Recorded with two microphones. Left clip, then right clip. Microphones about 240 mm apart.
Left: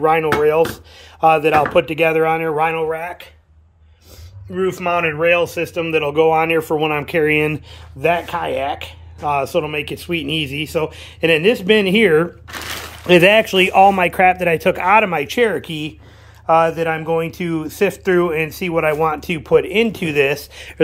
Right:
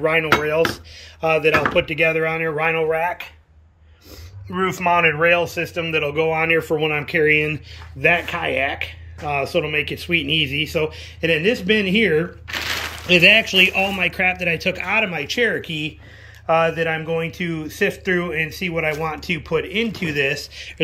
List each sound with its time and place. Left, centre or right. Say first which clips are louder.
0.0 s speech: left 3 dB; centre
4.6 s speech: even; centre